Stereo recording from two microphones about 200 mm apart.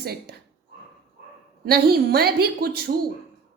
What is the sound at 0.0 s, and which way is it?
Speech, 50° right (ahead or behind).